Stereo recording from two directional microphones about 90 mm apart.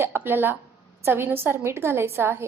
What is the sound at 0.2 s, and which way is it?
A woman's voice, 20° right (ahead or behind).